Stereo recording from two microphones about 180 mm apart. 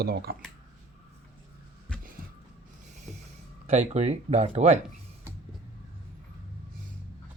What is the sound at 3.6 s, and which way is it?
Speech, 40° right (ahead or behind).